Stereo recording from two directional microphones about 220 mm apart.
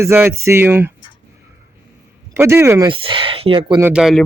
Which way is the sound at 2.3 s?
10° right (ahead or behind).